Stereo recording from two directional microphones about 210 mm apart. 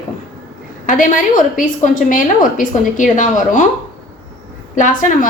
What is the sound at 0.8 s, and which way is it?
A woman's voice, 40° left (ahead or behind).